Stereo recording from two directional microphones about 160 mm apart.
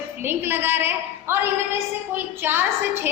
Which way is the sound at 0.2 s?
15° right (ahead or behind).